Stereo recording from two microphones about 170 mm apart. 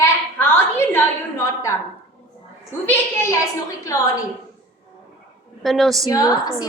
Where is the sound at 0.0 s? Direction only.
15° left (ahead or behind).